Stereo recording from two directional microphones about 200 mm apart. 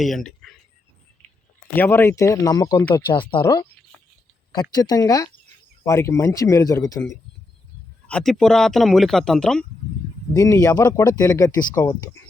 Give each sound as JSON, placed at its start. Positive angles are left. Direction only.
{"t": 0.0, "sound": "speech", "side_deg": 0}
{"t": 1.7, "sound": "speech", "side_deg": 10}
{"t": 4.7, "sound": "speech", "side_deg": 20}
{"t": 8.0, "sound": "speech", "side_deg": 5}
{"t": 10.3, "sound": "speech", "side_deg": 15}